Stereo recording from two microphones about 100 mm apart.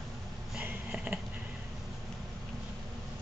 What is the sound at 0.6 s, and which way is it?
Sniff, 15° right (ahead or behind).